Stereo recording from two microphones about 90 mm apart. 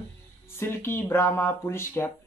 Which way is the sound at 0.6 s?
25° left (ahead or behind).